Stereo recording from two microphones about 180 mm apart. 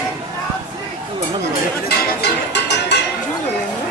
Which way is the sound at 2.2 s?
70° left (ahead or behind).